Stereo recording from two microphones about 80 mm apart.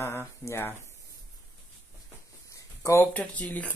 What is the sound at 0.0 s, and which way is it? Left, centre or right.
Speech, left.